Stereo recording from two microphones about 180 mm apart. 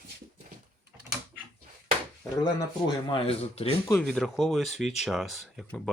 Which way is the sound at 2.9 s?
25° left (ahead or behind).